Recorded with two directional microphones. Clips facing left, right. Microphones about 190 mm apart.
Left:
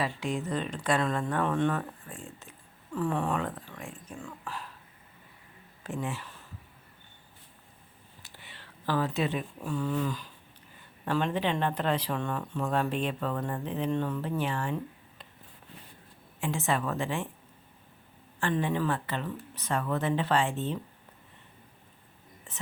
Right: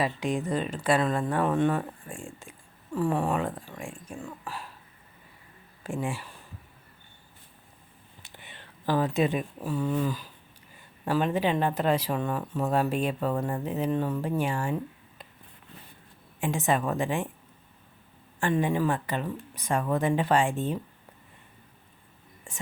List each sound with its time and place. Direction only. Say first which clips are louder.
0.0 s speech: right 3 dB; 15° right (ahead or behind)
4.4 s throat clearing: right 1 dB; 10° right (ahead or behind)
5.8 s speech: right 3 dB; 10° right (ahead or behind)
8.2 s a sound: right 3 dB; 20° right (ahead or behind)
11.0 s speech: right 3 dB; 5° right (ahead or behind)
16.4 s speech: right 3 dB; 15° right (ahead or behind)
18.3 s speech: right 3 dB; 15° right (ahead or behind)
22.5 s speech: right 3 dB; 10° right (ahead or behind)